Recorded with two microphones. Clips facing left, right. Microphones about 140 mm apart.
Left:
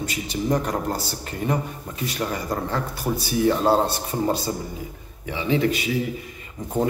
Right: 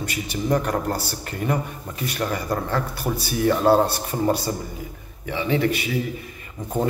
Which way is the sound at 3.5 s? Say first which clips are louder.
Right 3 dB; 20° left (ahead or behind).